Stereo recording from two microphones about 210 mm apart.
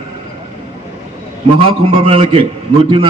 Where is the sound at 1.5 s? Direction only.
25° right (ahead or behind).